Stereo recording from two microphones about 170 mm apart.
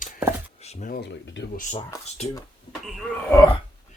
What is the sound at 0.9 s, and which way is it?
Speech, 90° left.